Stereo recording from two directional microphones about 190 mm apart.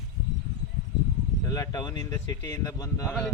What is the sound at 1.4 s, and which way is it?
Speech, 20° left (ahead or behind).